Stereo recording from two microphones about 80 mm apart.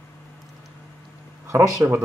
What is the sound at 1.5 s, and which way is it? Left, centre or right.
Speech, right.